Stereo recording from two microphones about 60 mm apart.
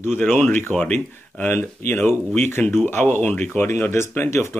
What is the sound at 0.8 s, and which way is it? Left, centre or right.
Speech, centre.